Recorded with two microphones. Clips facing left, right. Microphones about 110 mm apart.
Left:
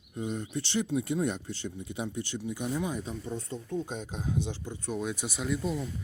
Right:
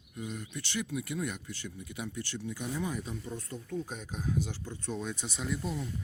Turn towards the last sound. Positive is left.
turn(degrees=0)  # may be behind; listen again after turning